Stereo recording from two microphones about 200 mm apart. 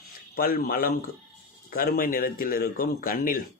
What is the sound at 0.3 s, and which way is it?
Speech, 50° left (ahead or behind).